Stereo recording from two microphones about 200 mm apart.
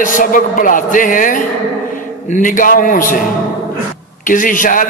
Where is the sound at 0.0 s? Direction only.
40° left (ahead or behind).